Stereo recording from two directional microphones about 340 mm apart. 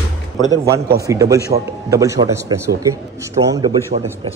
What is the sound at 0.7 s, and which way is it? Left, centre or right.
Speech, right.